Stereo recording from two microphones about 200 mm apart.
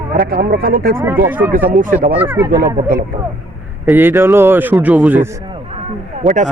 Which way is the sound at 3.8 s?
10° right (ahead or behind).